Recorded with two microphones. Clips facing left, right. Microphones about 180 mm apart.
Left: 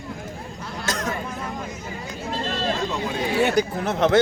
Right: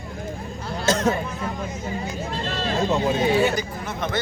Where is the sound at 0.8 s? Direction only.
25° right (ahead or behind).